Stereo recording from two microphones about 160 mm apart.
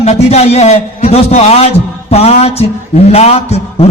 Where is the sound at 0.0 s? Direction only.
40° left (ahead or behind).